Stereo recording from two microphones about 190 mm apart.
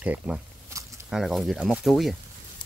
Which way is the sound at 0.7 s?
15° right (ahead or behind).